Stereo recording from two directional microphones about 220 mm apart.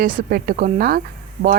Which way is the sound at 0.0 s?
40° right (ahead or behind).